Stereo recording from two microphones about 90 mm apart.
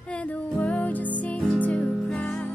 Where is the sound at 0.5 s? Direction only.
15° left (ahead or behind).